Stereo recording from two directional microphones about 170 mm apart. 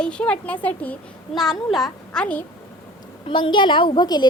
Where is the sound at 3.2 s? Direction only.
30° left (ahead or behind).